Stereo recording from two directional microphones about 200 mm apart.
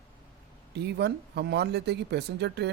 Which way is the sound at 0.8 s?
55° right (ahead or behind).